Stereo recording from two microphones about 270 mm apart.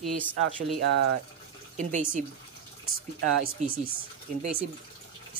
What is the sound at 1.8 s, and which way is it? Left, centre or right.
Speech, right.